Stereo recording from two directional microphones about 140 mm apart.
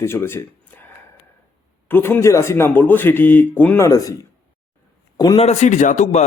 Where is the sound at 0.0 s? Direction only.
15° left (ahead or behind).